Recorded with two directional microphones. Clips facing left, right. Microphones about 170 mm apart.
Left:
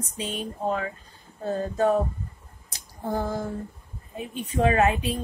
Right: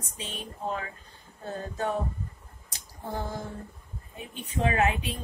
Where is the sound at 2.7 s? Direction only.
40° left (ahead or behind).